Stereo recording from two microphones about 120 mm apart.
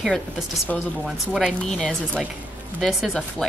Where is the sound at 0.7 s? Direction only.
10° left (ahead or behind).